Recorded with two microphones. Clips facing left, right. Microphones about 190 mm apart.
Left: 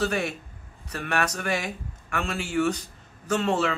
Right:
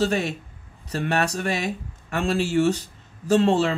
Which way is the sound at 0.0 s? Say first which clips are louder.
Right 3 dB; 25° right (ahead or behind).